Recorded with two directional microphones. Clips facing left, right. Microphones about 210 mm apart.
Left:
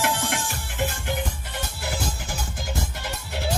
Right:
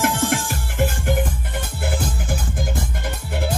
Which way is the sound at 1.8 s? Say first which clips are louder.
Right 6 dB; 55° right (ahead or behind).